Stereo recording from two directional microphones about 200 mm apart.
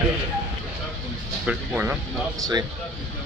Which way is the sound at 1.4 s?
5° right (ahead or behind).